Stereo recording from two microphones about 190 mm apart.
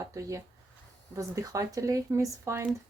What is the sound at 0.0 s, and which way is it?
Speech, 15° right (ahead or behind).